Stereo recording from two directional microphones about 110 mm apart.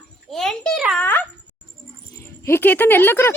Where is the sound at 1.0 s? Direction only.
15° left (ahead or behind).